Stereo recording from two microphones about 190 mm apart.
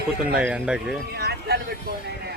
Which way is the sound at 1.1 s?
55° right (ahead or behind).